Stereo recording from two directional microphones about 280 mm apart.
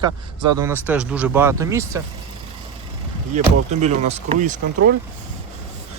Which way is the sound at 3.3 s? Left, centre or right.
Right.